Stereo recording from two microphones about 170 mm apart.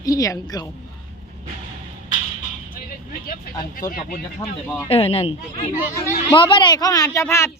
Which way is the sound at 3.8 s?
55° left (ahead or behind).